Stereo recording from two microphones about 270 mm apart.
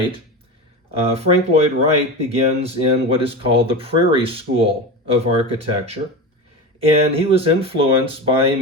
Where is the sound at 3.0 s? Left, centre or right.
Right.